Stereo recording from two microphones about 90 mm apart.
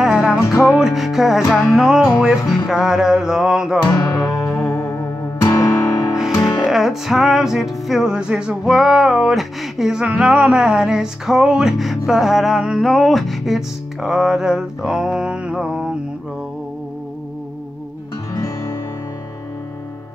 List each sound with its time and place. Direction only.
0.0 s music: 5° right (ahead or behind)
0.4 s music: 30° left (ahead or behind)
0.7 s music: 5° right (ahead or behind)
4.2 s music: 35° left (ahead or behind)
6.4 s music: centre (ahead or behind)